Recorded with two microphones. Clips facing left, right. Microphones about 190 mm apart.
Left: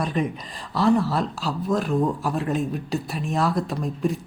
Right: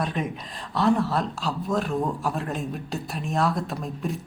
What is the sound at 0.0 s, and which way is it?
Speech, centre (ahead or behind).